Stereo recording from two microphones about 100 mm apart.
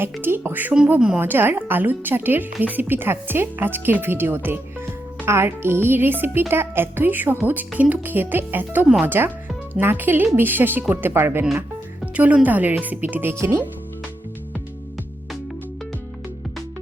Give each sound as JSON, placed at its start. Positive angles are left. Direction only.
{"t": 0.0, "sound": "a woman's voice", "side_deg": -20}
{"t": 13.3, "sound": "a woman's voice", "side_deg": -30}